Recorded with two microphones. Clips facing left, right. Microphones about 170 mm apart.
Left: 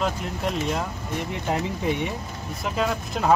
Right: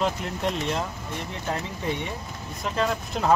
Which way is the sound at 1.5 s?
15° left (ahead or behind).